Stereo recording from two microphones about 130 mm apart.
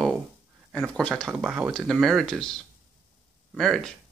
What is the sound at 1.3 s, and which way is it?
Speech, 10° right (ahead or behind).